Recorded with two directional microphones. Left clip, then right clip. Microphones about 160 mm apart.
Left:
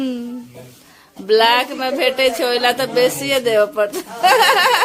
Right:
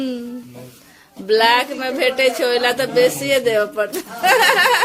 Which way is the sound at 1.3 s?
15° left (ahead or behind).